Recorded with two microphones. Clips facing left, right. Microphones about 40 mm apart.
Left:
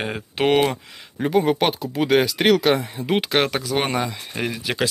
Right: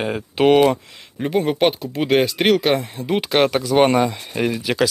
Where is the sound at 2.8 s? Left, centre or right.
Centre.